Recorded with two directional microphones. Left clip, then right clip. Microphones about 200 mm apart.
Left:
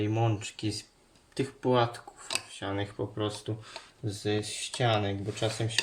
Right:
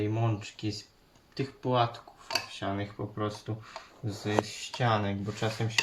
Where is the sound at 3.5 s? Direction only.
45° left (ahead or behind).